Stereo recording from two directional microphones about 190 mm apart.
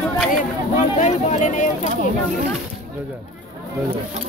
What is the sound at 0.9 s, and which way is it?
Speech, 40° left (ahead or behind).